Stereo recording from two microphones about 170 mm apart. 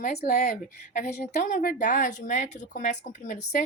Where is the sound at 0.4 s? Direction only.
50° left (ahead or behind).